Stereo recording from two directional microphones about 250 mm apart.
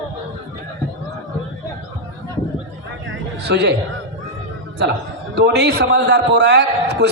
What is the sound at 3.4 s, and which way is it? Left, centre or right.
Speech, right.